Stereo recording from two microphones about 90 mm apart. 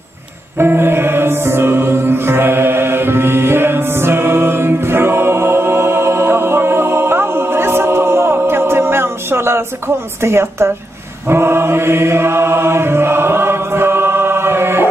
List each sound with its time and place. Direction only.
0.6 s music: 25° right (ahead or behind)
11.2 s chant: 25° right (ahead or behind)